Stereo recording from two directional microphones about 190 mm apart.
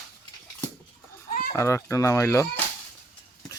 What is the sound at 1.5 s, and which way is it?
Speech, 15° left (ahead or behind).